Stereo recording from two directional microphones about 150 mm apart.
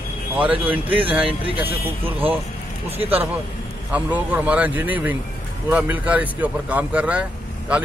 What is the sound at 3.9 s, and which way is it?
Speech, 10° right (ahead or behind).